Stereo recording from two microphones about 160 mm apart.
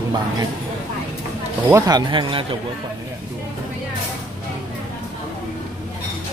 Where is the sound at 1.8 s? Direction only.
25° right (ahead or behind).